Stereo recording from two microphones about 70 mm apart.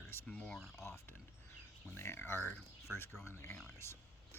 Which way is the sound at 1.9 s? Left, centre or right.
Left.